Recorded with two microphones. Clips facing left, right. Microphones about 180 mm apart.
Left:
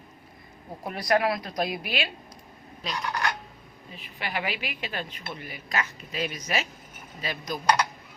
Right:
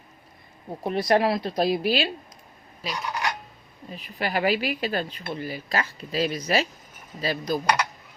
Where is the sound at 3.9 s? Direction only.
40° right (ahead or behind).